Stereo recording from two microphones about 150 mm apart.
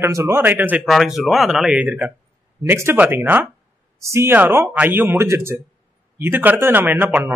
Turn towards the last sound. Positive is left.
turn(degrees=-10)  # may be behind; listen again after turning